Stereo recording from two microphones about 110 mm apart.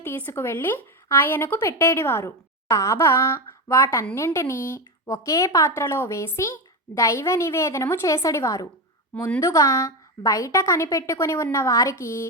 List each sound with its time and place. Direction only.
0.0 s speech: 20° left (ahead or behind)